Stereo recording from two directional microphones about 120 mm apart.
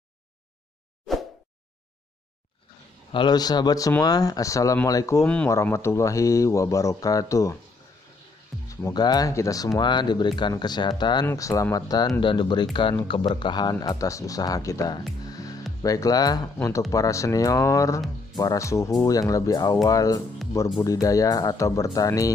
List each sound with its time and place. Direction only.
3.1 s speech: 40° left (ahead or behind)
8.6 s speech: 30° left (ahead or behind)
9.8 s speech: 40° left (ahead or behind)
11.2 s speech: 25° left (ahead or behind)
15.2 s music: 30° left (ahead or behind)
15.8 s speech: 30° left (ahead or behind)